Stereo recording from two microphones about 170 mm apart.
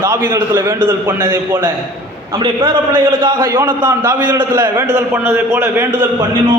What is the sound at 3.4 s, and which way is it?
Speech, 15° right (ahead or behind).